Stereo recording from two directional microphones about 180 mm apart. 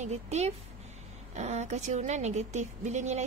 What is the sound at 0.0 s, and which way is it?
Speech, 40° right (ahead or behind).